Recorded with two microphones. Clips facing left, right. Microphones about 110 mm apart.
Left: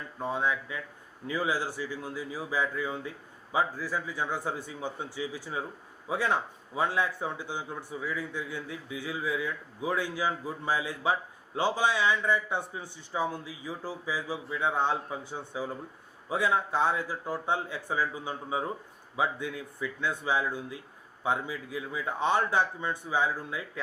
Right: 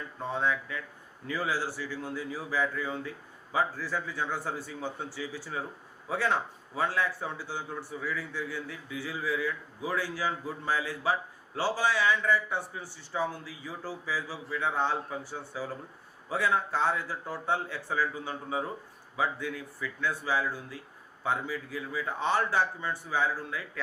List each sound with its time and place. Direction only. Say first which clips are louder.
0.2 s speech: even; 15° left (ahead or behind)